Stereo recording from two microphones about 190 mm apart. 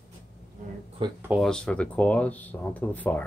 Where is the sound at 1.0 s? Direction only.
25° right (ahead or behind).